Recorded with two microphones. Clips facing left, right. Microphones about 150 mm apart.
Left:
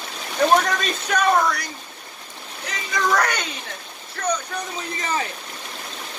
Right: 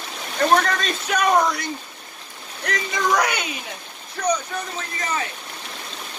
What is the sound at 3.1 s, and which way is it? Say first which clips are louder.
Speech: even; 10° right (ahead or behind).